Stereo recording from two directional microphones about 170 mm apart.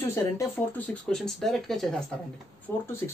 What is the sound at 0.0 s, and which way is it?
Speech, 15° left (ahead or behind).